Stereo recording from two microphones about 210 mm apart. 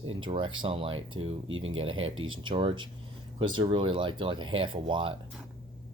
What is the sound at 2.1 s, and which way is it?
Speech, 75° right (ahead or behind).